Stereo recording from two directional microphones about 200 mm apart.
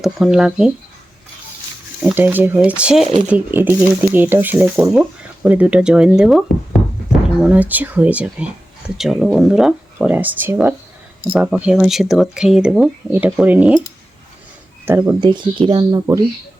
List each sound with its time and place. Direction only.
0.0 s speech: 5° right (ahead or behind)
2.0 s speech: 10° right (ahead or behind)
7.4 s speech: 5° right (ahead or behind)
14.8 s speech: 15° right (ahead or behind)